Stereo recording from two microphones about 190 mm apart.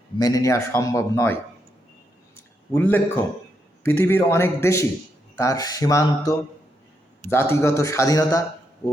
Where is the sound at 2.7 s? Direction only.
10° left (ahead or behind).